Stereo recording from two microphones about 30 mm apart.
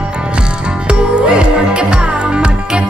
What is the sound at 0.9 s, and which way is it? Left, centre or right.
Music, right.